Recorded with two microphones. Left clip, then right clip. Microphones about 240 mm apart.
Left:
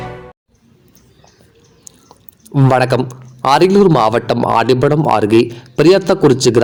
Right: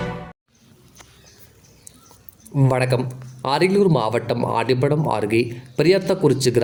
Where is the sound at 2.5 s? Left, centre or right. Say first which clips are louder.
Left 8 dB; centre.